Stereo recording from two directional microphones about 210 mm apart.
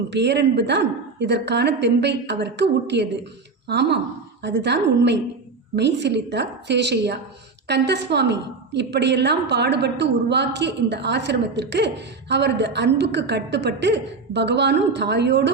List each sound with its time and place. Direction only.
0.1 s a woman's voice: 55° right (ahead or behind)